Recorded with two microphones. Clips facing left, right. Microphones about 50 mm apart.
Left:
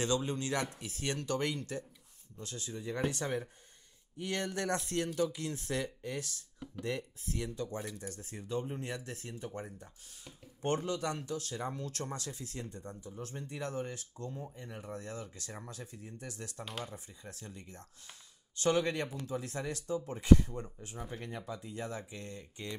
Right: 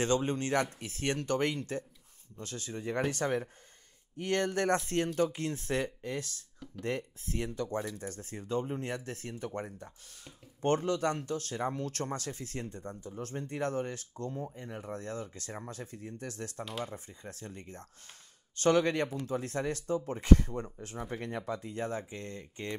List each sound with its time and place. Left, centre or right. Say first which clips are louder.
0.0 s speech: right 4 dB; right
14.3 s speech: right 5 dB; right